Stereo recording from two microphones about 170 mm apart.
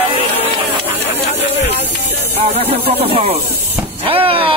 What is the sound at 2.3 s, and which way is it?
Speech, 35° right (ahead or behind).